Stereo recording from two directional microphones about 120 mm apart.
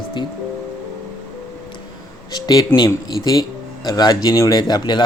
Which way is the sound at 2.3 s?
35° left (ahead or behind).